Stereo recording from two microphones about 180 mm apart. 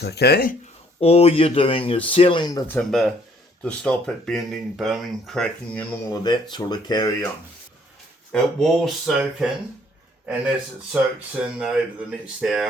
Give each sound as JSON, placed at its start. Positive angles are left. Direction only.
{"t": 0.0, "sound": "speech", "side_deg": 65}
{"t": 0.9, "sound": "speech", "side_deg": 35}
{"t": 2.7, "sound": "speech", "side_deg": 5}
{"t": 6.2, "sound": "speech", "side_deg": 25}
{"t": 8.3, "sound": "speech", "side_deg": 5}
{"t": 10.9, "sound": "speech", "side_deg": -5}